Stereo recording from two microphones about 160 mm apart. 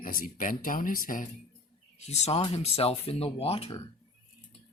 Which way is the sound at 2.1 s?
45° left (ahead or behind).